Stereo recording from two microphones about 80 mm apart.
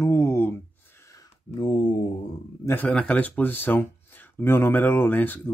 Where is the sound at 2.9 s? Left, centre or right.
Centre.